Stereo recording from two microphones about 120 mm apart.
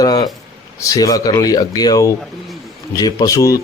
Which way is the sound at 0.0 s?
30° left (ahead or behind).